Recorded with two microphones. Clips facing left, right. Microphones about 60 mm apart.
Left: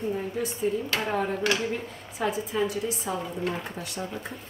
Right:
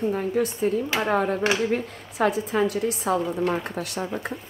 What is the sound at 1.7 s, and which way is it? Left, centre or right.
A woman's voice, right.